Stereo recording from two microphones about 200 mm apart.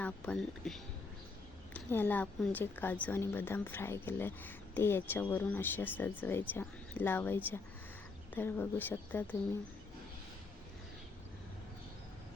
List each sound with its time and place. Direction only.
0.0 s a woman's voice: 5° left (ahead or behind)